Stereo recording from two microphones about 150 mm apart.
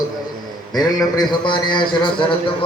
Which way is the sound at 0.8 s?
25° left (ahead or behind).